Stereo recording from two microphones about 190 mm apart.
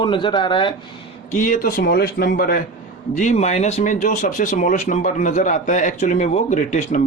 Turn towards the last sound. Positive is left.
turn(degrees=40)  # may be behind; listen again after turning